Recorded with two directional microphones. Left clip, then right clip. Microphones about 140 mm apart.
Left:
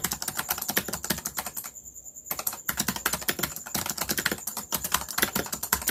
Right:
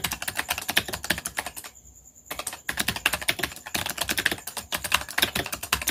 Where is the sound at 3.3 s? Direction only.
15° right (ahead or behind).